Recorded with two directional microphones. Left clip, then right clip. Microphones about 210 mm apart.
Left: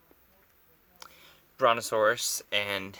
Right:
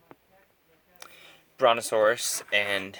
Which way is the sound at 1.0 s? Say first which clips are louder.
Right 3 dB; 50° left (ahead or behind).